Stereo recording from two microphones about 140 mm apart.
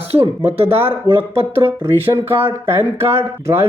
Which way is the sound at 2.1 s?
15° right (ahead or behind).